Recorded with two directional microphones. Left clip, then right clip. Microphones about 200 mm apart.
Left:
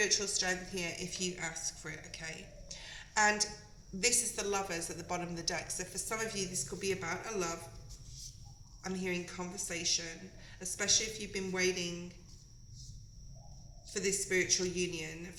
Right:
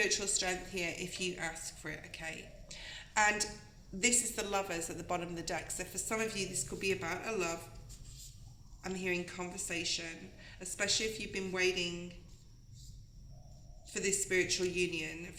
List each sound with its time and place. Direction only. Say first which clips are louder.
0.0 s a woman's voice: left 1 dB; 35° right (ahead or behind)
8.8 s a woman's voice: right 1 dB; 40° right (ahead or behind)
13.9 s a woman's voice: even; 40° right (ahead or behind)